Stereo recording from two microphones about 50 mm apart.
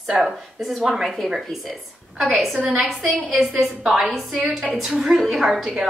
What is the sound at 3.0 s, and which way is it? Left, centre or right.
A woman's voice, centre.